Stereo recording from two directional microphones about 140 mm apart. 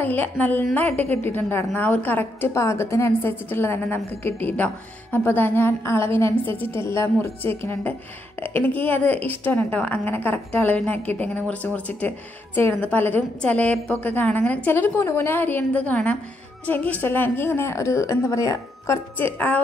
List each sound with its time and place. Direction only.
0.0 s a woman's voice: 15° left (ahead or behind)
0.8 s a woman's voice: 50° right (ahead or behind)
1.1 s a woman's voice: 15° left (ahead or behind)